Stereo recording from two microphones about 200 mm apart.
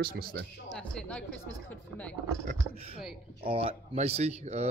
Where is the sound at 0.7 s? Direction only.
5° left (ahead or behind).